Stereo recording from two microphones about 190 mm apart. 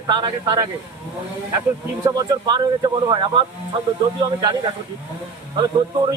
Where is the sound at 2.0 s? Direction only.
20° right (ahead or behind).